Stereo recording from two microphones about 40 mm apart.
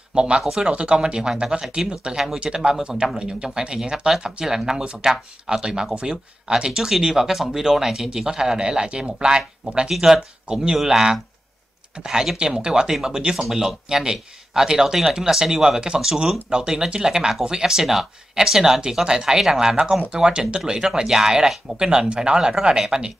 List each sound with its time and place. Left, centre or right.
0.1 s speech: right
9.8 s speech: centre